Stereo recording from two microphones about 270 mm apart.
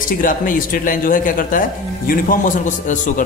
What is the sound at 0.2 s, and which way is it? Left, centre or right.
Speech, left.